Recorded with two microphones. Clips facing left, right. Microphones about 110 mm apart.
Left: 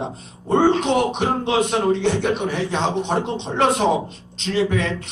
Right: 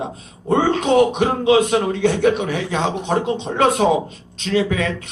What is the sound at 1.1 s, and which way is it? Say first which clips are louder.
Speech: right 5 dB; 50° right (ahead or behind).